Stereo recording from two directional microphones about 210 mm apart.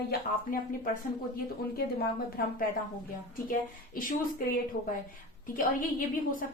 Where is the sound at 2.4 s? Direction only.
45° left (ahead or behind).